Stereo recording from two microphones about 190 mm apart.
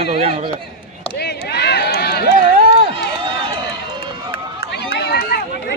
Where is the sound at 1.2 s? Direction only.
60° left (ahead or behind).